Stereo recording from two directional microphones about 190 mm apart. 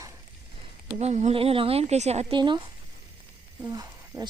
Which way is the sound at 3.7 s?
20° right (ahead or behind).